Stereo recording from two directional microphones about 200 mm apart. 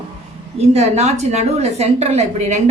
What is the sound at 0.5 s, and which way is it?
A woman's voice, 35° right (ahead or behind).